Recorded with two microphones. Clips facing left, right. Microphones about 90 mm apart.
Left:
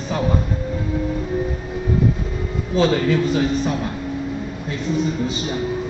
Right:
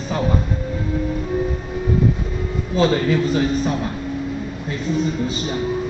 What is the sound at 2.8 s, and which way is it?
Speech, 5° right (ahead or behind).